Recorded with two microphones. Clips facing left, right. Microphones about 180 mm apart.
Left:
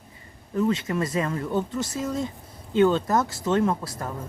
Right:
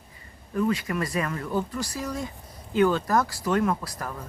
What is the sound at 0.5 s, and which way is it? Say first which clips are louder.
Speech: left 2 dB; 25° left (ahead or behind).